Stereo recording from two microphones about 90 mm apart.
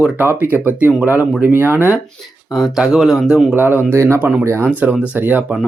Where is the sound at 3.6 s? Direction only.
25° right (ahead or behind).